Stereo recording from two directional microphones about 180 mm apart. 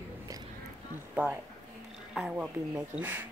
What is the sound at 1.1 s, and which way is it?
Speech, 10° right (ahead or behind).